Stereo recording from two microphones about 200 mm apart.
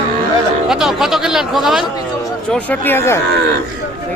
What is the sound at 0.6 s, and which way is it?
Speech, centre (ahead or behind).